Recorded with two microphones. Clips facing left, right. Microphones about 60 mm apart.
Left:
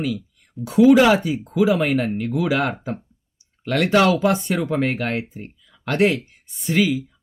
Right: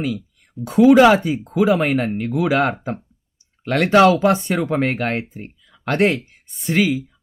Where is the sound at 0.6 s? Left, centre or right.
Right.